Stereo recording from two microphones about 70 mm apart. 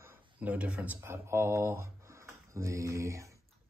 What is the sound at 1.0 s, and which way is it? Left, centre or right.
Speech, right.